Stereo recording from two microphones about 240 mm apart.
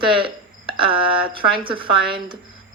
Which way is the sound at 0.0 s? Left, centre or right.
Right.